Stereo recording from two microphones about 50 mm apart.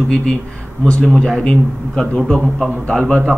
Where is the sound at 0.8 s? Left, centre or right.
Centre.